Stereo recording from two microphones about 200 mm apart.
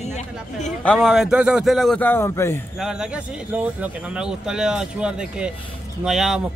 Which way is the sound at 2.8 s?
5° right (ahead or behind).